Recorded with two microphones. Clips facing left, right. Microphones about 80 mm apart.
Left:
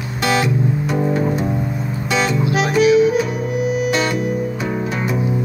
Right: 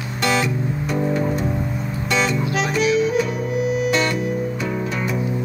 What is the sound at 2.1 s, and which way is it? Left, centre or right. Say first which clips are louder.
Music: left 3 dB; centre.